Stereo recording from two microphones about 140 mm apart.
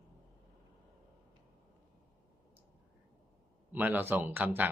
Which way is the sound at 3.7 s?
15° right (ahead or behind).